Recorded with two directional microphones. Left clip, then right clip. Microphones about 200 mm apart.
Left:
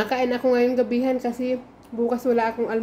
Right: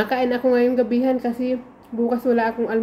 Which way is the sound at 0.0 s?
5° left (ahead or behind).